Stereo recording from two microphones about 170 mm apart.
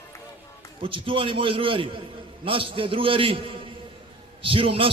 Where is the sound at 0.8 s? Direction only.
30° right (ahead or behind).